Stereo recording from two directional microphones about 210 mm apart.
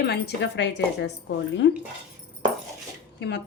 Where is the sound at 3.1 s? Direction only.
55° left (ahead or behind).